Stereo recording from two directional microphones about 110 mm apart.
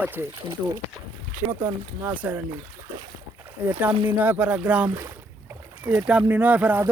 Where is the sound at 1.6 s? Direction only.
15° right (ahead or behind).